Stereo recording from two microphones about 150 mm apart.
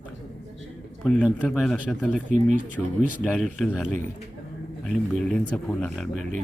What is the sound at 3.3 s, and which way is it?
Speech, centre (ahead or behind).